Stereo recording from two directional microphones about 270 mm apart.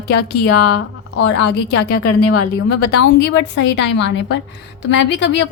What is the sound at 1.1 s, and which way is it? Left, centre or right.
Speech, left.